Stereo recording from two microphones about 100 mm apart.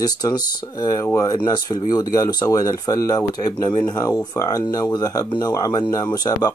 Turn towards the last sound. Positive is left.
turn(degrees=40)  # may be behind; listen again after turning